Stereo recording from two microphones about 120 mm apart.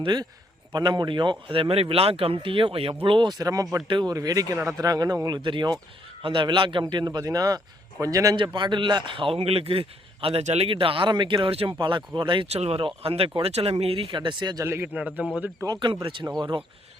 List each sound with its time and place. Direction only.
0.0 s speech: 35° right (ahead or behind)
3.8 s speech: 40° right (ahead or behind)
5.4 s speech: 40° right (ahead or behind)
8.4 s speech: 40° right (ahead or behind)
10.4 s speech: 65° right (ahead or behind)
10.7 s speech: 45° right (ahead or behind)
12.5 s speech: 60° right (ahead or behind); by 14.6 s 40° right (ahead or behind)
14.6 s speech: 20° right (ahead or behind)
14.9 s speech: 10° right (ahead or behind)
15.6 s speech: 35° right (ahead or behind)